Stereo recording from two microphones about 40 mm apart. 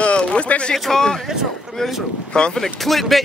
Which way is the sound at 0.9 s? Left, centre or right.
Centre.